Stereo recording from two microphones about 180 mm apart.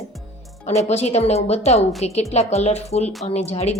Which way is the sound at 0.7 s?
40° left (ahead or behind).